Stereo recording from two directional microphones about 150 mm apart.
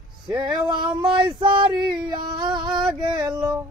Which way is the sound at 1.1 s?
30° right (ahead or behind).